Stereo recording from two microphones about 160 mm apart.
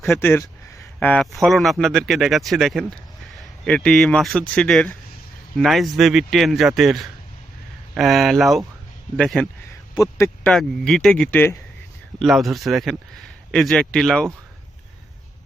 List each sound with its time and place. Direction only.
0.2 s a sound: 15° left (ahead or behind)
0.9 s speech: 10° left (ahead or behind)
9.9 s a man's voice: 20° left (ahead or behind)
10.5 s speech: centre (ahead or behind)
12.2 s speech: centre (ahead or behind)